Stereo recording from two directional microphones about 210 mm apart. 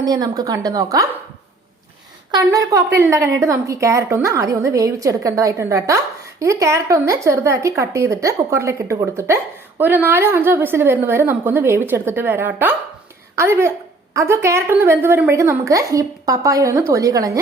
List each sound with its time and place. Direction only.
0.0 s a woman's voice: 20° right (ahead or behind)
2.3 s a woman's voice: 15° right (ahead or behind)